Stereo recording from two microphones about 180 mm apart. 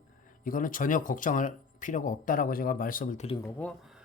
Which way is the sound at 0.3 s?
50° left (ahead or behind).